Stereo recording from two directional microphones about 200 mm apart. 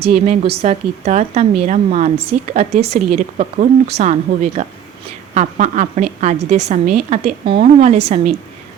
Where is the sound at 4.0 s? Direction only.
35° right (ahead or behind).